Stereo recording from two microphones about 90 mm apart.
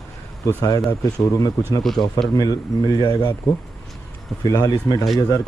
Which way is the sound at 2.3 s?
45° left (ahead or behind).